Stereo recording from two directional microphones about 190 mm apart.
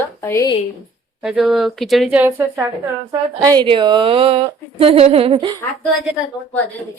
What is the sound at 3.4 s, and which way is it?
Speech, 20° right (ahead or behind).